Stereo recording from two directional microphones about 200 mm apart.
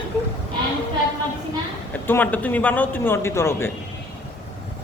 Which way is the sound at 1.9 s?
10° left (ahead or behind).